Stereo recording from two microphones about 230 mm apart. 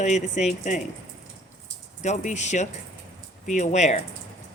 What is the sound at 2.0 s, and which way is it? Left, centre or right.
Speech, left.